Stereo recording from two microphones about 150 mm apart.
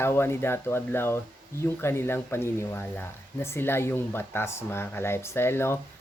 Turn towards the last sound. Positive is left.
turn(degrees=15)  # may be behind; listen again after turning